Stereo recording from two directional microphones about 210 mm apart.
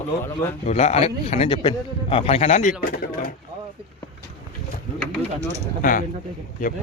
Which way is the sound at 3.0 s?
45° left (ahead or behind).